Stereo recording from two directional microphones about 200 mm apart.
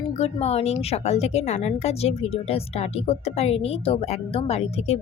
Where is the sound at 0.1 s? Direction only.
30° left (ahead or behind).